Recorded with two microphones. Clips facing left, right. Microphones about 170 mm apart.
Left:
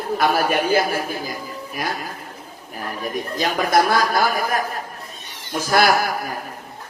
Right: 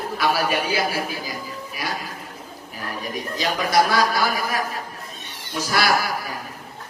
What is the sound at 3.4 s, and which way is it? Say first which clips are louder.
A man's voice: left 2 dB; 50° left (ahead or behind).